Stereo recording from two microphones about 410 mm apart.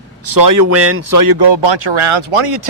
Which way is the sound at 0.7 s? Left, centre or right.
Right.